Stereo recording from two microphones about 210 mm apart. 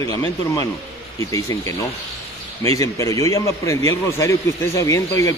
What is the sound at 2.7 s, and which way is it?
Speech, 15° left (ahead or behind).